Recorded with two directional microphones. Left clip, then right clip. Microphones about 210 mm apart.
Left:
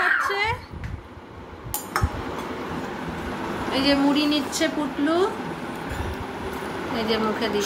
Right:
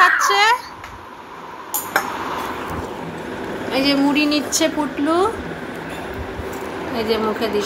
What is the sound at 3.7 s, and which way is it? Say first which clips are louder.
Speech: right 3 dB; 20° right (ahead or behind).